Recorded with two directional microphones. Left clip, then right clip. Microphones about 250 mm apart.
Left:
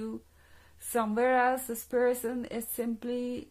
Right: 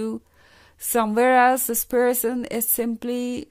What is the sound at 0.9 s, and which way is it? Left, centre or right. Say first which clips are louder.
Speech: right 9 dB; right.